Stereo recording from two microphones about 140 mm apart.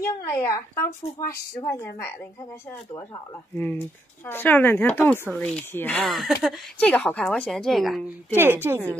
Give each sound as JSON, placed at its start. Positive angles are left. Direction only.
{"t": 0.0, "sound": "speech", "side_deg": 20}
{"t": 3.5, "sound": "speech", "side_deg": 15}
{"t": 6.0, "sound": "speech", "side_deg": 0}
{"t": 6.8, "sound": "speech", "side_deg": 10}
{"t": 8.4, "sound": "a woman's voice", "side_deg": -15}